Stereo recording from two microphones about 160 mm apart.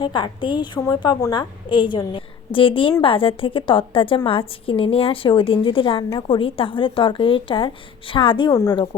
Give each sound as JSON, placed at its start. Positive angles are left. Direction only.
{"t": 0.0, "sound": "a woman's voice", "side_deg": 30}